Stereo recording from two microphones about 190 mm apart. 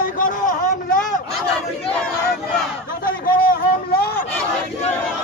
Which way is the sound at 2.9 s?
50° left (ahead or behind).